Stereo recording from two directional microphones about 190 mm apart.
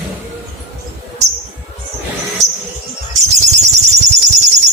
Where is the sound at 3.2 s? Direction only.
35° right (ahead or behind).